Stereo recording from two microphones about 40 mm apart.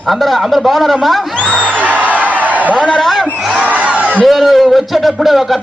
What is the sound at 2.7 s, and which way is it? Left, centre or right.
Speech, left.